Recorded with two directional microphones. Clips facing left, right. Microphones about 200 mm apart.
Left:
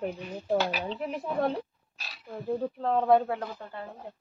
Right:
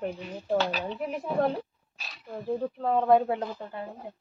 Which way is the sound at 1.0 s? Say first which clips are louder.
Right 3 dB; centre (ahead or behind).